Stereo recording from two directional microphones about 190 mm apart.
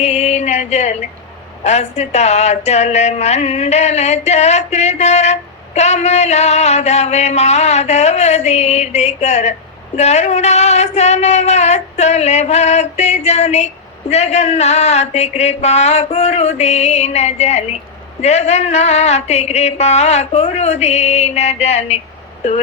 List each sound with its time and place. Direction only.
0.0 s music: 35° left (ahead or behind)
1.6 s speech: 35° left (ahead or behind)